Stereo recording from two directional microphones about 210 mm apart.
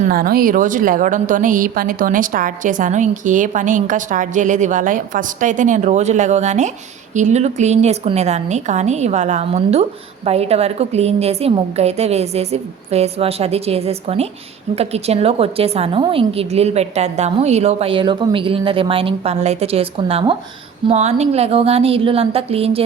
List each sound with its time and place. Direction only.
0.0 s a woman's voice: 45° right (ahead or behind); by 22.8 s 30° right (ahead or behind)